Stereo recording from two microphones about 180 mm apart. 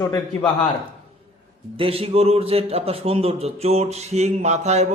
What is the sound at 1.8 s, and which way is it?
A man's voice, 30° right (ahead or behind).